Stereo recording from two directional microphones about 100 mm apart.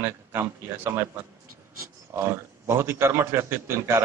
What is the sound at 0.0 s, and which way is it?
A man's voice, 25° right (ahead or behind).